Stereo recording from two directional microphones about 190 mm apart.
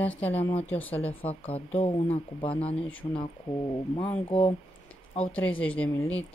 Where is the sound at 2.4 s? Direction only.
5° left (ahead or behind).